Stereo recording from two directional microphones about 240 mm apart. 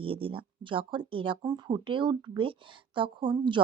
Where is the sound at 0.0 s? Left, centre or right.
Right.